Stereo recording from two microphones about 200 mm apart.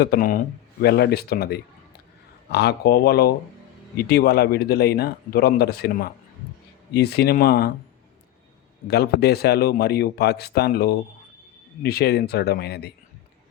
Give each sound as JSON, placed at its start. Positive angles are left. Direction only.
{"t": 0.0, "sound": "speech", "side_deg": 50}
{"t": 8.9, "sound": "speech", "side_deg": 55}